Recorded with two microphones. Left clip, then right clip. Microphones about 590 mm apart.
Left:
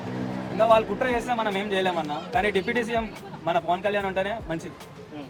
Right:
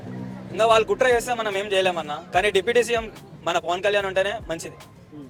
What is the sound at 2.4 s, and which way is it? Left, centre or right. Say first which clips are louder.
Speech: right 5 dB; right.